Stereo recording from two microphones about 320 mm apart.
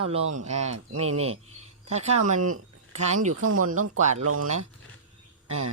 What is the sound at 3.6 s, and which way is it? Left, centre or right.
Speech, right.